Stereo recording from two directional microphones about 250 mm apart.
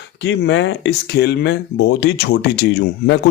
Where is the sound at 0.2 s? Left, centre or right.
Left.